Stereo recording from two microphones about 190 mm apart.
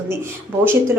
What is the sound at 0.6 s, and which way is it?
Speech, 10° right (ahead or behind).